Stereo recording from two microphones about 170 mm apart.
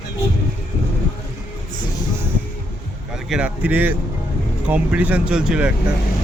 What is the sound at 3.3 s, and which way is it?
Speech, 5° right (ahead or behind).